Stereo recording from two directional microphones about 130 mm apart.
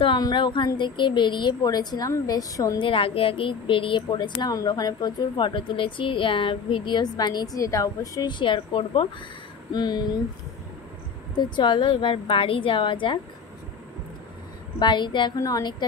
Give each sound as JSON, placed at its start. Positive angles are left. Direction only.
{"t": 0.2, "sound": "a woman's voice", "side_deg": 35}
{"t": 2.8, "sound": "a woman's voice", "side_deg": 45}
{"t": 11.3, "sound": "a woman's voice", "side_deg": 35}
{"t": 14.8, "sound": "a woman's voice", "side_deg": 35}